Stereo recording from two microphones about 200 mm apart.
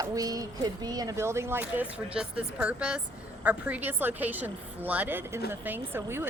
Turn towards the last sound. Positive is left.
turn(degrees=-10)  # may be behind; listen again after turning